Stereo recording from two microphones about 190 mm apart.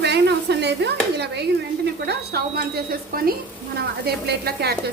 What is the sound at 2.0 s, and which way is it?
A woman's voice, 55° right (ahead or behind).